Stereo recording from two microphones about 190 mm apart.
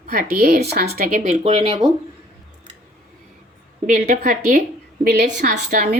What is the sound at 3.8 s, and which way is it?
Speech, 45° right (ahead or behind).